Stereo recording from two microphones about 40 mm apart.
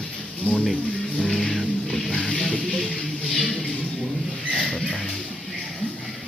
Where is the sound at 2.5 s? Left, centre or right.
Left.